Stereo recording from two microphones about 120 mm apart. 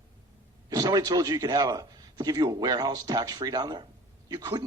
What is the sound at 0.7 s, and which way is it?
A man's voice, 35° right (ahead or behind).